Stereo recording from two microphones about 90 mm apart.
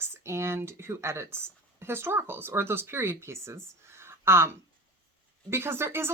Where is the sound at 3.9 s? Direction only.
30° right (ahead or behind).